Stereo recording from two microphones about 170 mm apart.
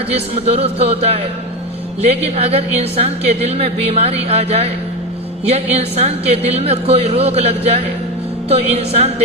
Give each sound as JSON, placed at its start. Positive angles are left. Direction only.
{"t": 0.1, "sound": "a woman's voice", "side_deg": -40}